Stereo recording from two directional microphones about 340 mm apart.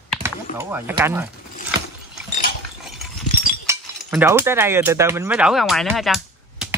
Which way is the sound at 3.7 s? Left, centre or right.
Centre.